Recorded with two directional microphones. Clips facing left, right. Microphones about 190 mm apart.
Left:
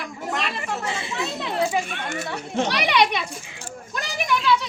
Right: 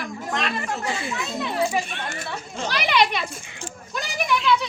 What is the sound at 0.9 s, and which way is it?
Speech, 25° left (ahead or behind).